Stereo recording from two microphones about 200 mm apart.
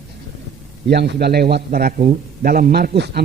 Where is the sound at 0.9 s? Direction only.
55° right (ahead or behind).